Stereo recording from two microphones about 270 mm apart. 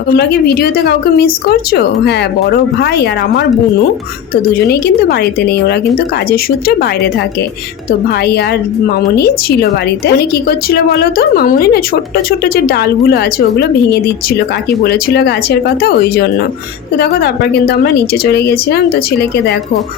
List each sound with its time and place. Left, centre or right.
0.1 s a woman's voice: left
4.7 s a woman's voice: left
14.8 s a woman's voice: left